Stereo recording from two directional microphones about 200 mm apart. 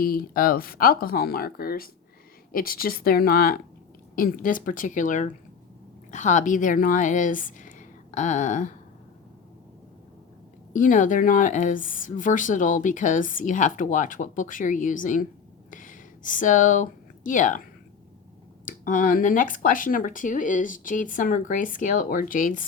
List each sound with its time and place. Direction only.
0.0 s a woman's voice: 45° left (ahead or behind)
10.7 s a woman's voice: 40° left (ahead or behind)
15.7 s a sound: 40° left (ahead or behind)
18.6 s a woman's voice: 40° left (ahead or behind)